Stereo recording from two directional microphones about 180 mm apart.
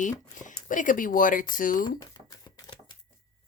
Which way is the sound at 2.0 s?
20° left (ahead or behind).